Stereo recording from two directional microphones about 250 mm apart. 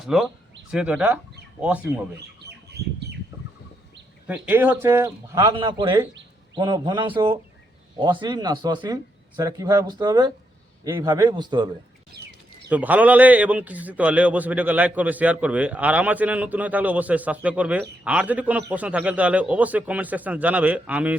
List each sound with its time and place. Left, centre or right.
0.0 s a man's voice: centre
2.7 s bird: right
4.3 s speech: centre
12.1 s bird: right
12.6 s a man's voice: centre